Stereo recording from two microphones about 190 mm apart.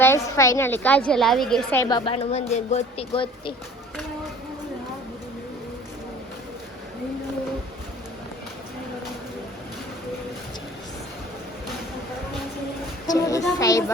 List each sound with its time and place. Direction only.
0.0 s a woman's voice: 15° left (ahead or behind)
1.8 s a woman's voice: 25° left (ahead or behind)
13.1 s a sound: 15° left (ahead or behind)
13.6 s a woman's voice: 15° left (ahead or behind)